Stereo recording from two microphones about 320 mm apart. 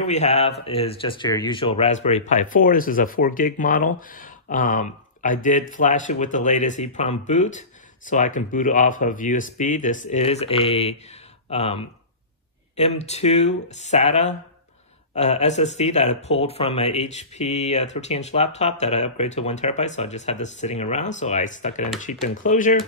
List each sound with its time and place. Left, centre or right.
0.0 s speech: left